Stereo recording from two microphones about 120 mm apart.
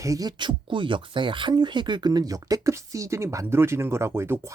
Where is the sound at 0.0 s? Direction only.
30° right (ahead or behind).